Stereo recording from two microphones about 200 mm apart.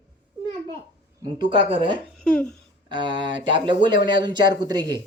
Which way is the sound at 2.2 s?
5° left (ahead or behind).